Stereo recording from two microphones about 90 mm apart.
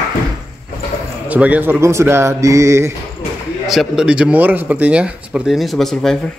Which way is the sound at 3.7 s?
5° right (ahead or behind).